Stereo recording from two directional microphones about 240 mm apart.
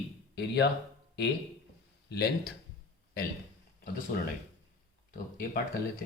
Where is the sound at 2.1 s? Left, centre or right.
Left.